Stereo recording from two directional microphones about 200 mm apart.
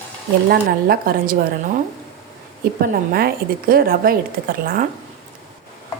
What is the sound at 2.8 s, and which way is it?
A woman's voice, 45° right (ahead or behind).